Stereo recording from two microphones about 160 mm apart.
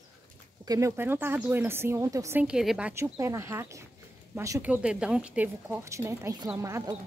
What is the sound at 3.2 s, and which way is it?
A woman's voice, 20° right (ahead or behind).